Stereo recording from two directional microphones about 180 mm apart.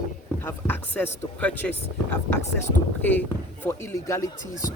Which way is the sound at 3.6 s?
15° left (ahead or behind).